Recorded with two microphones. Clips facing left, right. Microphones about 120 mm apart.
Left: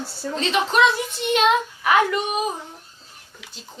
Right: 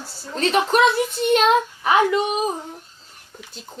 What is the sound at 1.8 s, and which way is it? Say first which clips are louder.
Speech: even; 25° right (ahead or behind).